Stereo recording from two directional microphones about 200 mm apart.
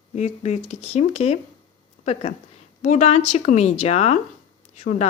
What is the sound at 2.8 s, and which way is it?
A woman's voice, 35° left (ahead or behind).